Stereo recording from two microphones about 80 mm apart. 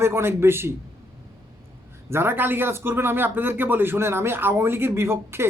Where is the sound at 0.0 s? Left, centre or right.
Right.